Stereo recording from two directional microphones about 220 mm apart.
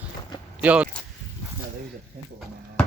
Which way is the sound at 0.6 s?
5° right (ahead or behind).